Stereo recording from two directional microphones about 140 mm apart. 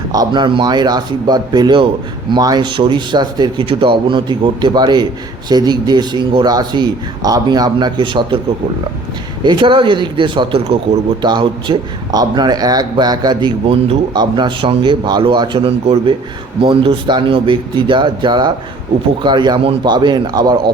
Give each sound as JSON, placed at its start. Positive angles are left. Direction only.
{"t": 0.1, "sound": "speech", "side_deg": -30}
{"t": 9.4, "sound": "speech", "side_deg": -35}